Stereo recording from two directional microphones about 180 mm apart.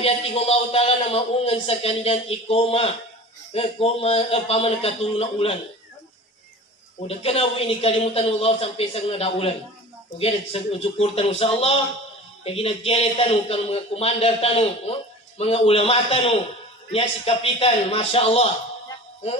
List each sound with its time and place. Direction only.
0.0 s a man's voice: 35° left (ahead or behind)
7.1 s a man's voice: 35° left (ahead or behind)